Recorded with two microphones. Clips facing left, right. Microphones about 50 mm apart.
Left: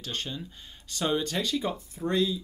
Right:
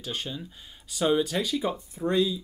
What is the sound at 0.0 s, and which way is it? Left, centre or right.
Speech, centre.